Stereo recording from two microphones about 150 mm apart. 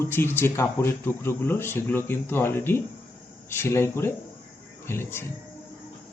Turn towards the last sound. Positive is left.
turn(degrees=15)  # may be behind; listen again after turning